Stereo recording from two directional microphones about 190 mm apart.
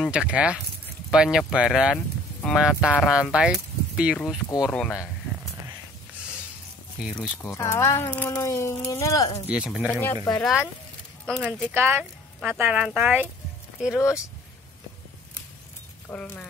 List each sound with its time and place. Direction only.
0.0 s speech: 5° right (ahead or behind)
7.0 s speech: centre (ahead or behind)
7.4 s speech: 15° left (ahead or behind)
9.5 s speech: 5° right (ahead or behind)
11.2 s speech: 5° left (ahead or behind)
16.1 s speech: 10° left (ahead or behind)